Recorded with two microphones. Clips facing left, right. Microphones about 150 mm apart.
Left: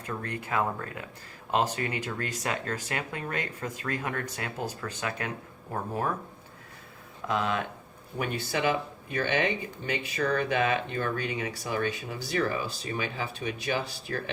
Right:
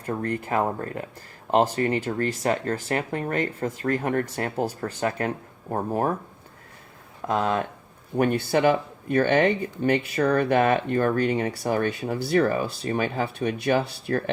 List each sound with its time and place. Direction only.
0.1 s speech: 40° right (ahead or behind)
7.3 s speech: 45° right (ahead or behind)
8.1 s speech: 55° right (ahead or behind)